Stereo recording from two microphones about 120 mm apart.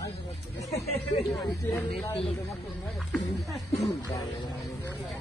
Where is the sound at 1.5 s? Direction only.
25° left (ahead or behind).